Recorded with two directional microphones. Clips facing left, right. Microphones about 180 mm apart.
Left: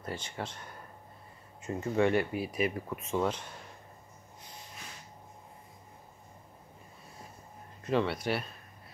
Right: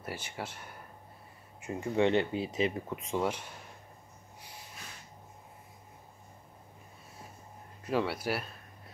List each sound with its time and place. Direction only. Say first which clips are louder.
0.0 s speech: left 1 dB; 10° right (ahead or behind)
7.8 s speech: left 2 dB; 5° right (ahead or behind)